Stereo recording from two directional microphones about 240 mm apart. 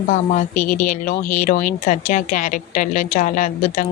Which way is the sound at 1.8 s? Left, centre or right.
Left.